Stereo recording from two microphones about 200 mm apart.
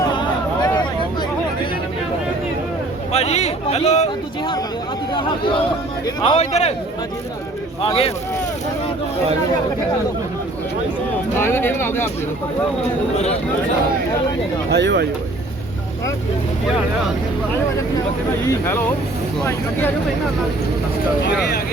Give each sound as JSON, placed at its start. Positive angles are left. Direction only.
{"t": 3.1, "sound": "speech", "side_deg": 30}
{"t": 6.2, "sound": "speech", "side_deg": 30}
{"t": 7.9, "sound": "speech", "side_deg": 30}
{"t": 11.3, "sound": "speech", "side_deg": 10}
{"t": 14.7, "sound": "speech", "side_deg": -60}